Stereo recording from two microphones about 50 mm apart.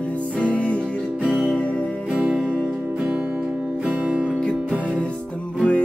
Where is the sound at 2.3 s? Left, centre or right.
Centre.